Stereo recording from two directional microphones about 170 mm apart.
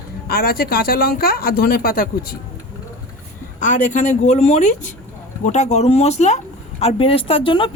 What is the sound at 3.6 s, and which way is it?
A woman's voice, 45° left (ahead or behind).